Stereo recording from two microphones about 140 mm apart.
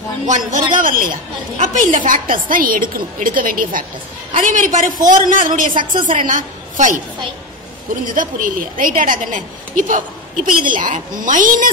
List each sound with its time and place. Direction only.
0.7 s a woman's voice: 75° right (ahead or behind)
1.6 s a woman's voice: 60° right (ahead or behind)
2.4 s a woman's voice: 85° right
4.3 s a woman's voice: 65° right (ahead or behind)
8.1 s a woman's voice: 75° right (ahead or behind)